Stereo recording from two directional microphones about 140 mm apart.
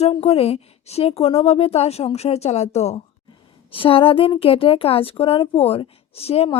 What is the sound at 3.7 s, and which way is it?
A woman's voice, 40° left (ahead or behind).